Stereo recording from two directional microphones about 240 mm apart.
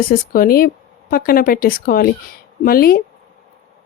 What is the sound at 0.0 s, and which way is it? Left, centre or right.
Speech, left.